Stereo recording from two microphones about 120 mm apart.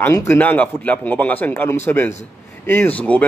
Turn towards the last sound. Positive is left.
turn(degrees=10)  # may be behind; listen again after turning